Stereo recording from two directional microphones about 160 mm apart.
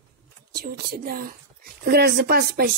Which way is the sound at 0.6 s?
70° right (ahead or behind).